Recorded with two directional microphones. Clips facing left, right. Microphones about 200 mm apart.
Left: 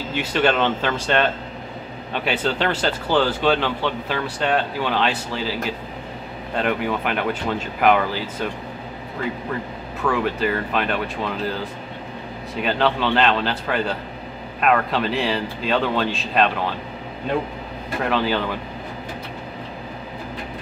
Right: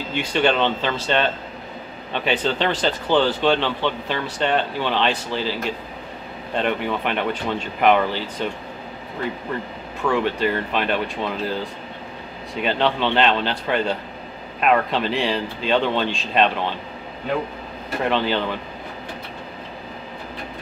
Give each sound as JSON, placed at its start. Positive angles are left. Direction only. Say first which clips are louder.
{"t": 0.1, "sound": "speech", "louder": "even", "side_deg": 5}
{"t": 10.0, "sound": "speech", "louder": "right 1 dB", "side_deg": 5}
{"t": 12.5, "sound": "speech", "louder": "even", "side_deg": 0}
{"t": 18.1, "sound": "speech", "louder": "left 1 dB", "side_deg": 5}